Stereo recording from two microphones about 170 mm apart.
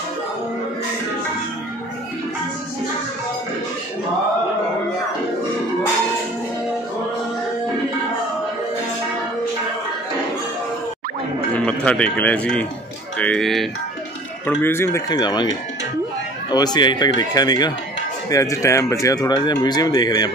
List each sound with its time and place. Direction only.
11.5 s speech: 5° left (ahead or behind)